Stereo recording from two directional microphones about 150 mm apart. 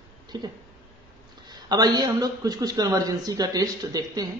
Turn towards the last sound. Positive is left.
turn(degrees=-25)  # may be behind; listen again after turning